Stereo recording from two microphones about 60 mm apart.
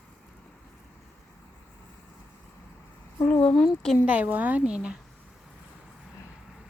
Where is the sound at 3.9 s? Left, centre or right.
Right.